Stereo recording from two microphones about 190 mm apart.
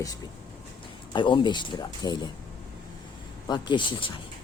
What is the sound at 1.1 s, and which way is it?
Speech, 25° left (ahead or behind).